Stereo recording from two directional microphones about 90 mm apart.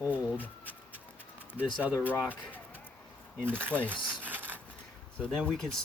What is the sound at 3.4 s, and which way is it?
Speech, 25° right (ahead or behind).